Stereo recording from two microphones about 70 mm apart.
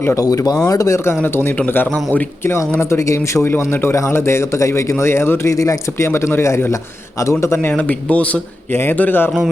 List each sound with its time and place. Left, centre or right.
0.2 s speech: left
1.2 s a man's voice: left
3.5 s a man's voice: left
7.6 s speech: left
8.7 s a man's voice: left